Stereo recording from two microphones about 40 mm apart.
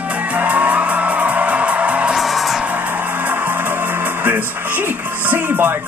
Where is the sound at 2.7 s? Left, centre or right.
Right.